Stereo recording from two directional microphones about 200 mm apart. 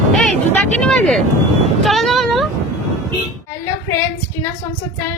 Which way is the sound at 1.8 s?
Centre (ahead or behind).